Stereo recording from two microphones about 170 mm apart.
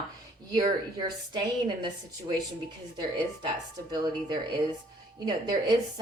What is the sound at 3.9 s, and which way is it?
Speech, 25° right (ahead or behind).